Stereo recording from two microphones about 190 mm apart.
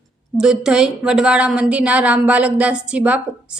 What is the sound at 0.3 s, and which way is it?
A woman's voice, 5° right (ahead or behind).